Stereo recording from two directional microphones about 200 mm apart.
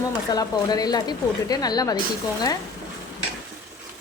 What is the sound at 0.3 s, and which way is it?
Speech, 20° left (ahead or behind).